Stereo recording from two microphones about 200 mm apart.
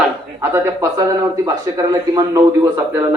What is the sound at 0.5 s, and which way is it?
Speech, 15° right (ahead or behind).